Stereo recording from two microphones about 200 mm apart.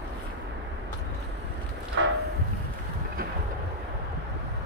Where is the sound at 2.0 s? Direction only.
65° right (ahead or behind).